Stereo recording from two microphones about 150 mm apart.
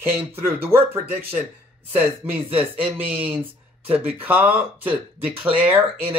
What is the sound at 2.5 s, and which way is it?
Speech, 10° right (ahead or behind).